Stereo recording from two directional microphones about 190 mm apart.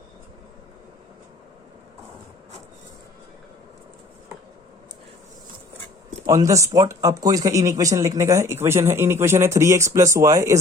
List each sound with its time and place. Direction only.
6.2 s speech: 15° right (ahead or behind)